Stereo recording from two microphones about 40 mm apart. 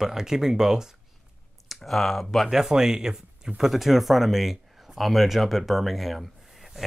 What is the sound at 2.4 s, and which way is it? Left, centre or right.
Speech, centre.